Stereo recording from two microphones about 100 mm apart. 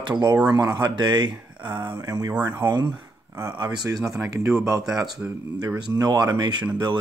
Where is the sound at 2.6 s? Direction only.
25° right (ahead or behind).